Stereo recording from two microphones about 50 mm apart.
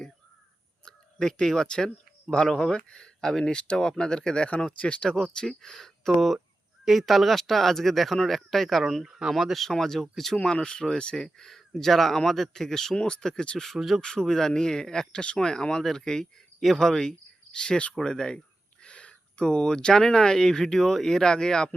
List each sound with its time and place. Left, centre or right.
0.9 s speech: centre
9.0 s speech: centre
9.3 s speech: centre
10.3 s speech: centre
13.6 s speech: centre
14.0 s speech: centre